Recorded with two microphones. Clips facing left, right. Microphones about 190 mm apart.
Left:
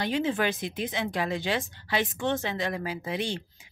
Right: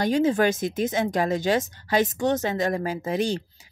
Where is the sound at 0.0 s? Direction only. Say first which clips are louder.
Right 6 dB; 40° right (ahead or behind).